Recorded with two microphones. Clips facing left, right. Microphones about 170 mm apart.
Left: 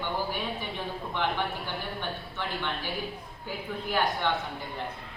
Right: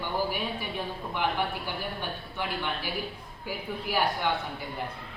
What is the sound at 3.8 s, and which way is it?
Speech, 10° right (ahead or behind).